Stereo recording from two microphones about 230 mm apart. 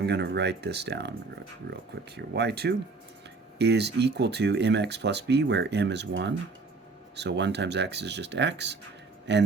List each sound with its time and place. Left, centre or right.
0.0 s speech: right